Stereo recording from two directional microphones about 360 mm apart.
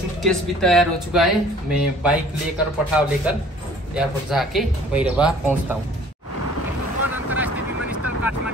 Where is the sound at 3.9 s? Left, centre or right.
Centre.